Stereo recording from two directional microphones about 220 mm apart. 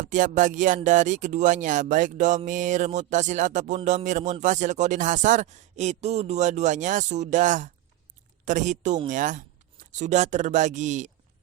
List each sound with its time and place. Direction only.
0.0 s speech: 35° right (ahead or behind)